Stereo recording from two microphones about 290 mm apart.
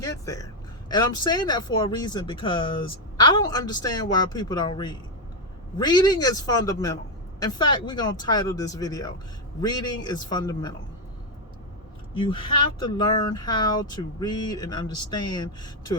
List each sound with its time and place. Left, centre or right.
0.0 s a sound: centre
0.9 s speech: centre
12.1 s speech: centre